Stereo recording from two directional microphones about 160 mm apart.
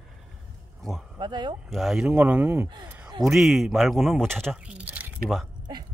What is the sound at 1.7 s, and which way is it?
Speech, centre (ahead or behind).